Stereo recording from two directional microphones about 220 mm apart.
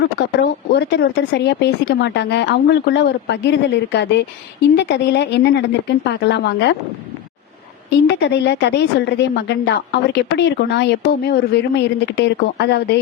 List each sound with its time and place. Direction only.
0.0 s a woman's voice: 50° left (ahead or behind)
8.0 s a woman's voice: 50° left (ahead or behind)